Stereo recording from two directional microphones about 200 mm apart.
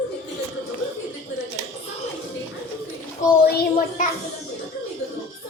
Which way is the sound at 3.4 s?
50° left (ahead or behind).